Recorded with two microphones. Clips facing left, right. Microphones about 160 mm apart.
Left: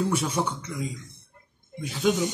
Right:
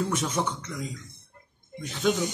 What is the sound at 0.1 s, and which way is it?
Speech, 10° left (ahead or behind).